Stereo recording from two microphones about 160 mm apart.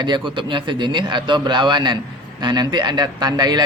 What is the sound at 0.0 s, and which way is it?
Speech, 30° right (ahead or behind).